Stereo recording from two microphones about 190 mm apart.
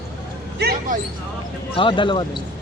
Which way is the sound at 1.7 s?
25° left (ahead or behind).